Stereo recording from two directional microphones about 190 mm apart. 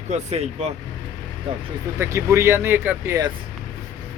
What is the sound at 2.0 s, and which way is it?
Speech, 15° right (ahead or behind).